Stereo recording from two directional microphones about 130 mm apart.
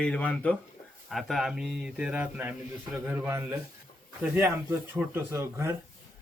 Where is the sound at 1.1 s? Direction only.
Centre (ahead or behind); by 5.7 s 20° right (ahead or behind).